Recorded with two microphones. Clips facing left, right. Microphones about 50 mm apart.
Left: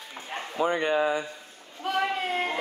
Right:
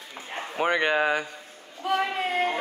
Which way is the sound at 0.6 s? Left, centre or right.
Right.